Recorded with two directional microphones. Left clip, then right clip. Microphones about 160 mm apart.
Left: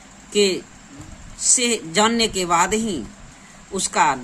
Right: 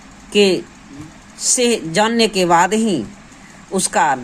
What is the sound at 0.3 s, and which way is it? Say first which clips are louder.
A woman's voice: right 5 dB; 55° right (ahead or behind).